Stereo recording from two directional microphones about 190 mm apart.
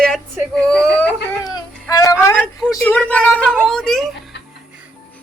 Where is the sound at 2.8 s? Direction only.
10° left (ahead or behind).